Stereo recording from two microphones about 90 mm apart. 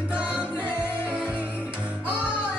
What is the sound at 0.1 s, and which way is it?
Music, 15° right (ahead or behind).